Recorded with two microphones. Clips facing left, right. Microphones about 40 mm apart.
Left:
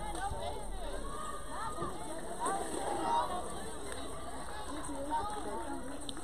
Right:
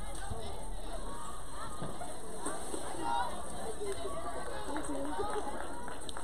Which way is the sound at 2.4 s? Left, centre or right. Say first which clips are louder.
Left 6 dB; left.